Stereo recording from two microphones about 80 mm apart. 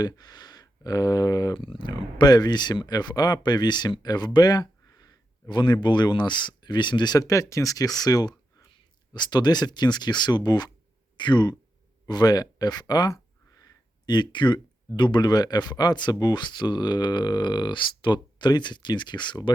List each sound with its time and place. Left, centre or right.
0.0 s speech: left
1.5 s speech: left
7.2 s speech: left
11.2 s speech: left